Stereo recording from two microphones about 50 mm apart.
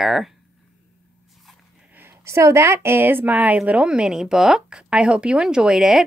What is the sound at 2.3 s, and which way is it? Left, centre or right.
Speech, right.